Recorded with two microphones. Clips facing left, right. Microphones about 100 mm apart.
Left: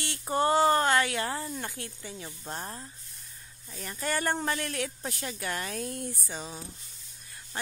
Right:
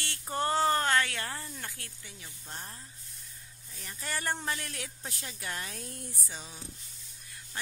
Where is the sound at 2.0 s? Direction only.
40° left (ahead or behind).